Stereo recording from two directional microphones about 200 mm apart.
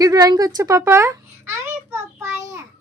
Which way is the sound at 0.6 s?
15° right (ahead or behind).